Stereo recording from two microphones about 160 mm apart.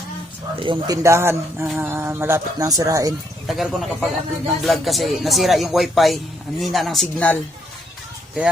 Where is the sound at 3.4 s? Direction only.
Centre (ahead or behind).